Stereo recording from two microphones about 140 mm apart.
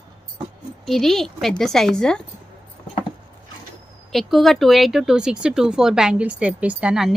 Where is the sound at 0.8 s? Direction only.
Centre (ahead or behind).